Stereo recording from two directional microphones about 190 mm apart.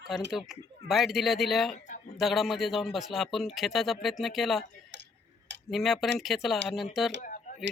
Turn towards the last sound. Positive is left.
turn(degrees=40)  # may be behind; listen again after turning